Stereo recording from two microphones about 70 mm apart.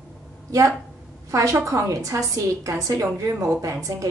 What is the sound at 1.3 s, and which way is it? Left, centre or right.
A woman's voice, right.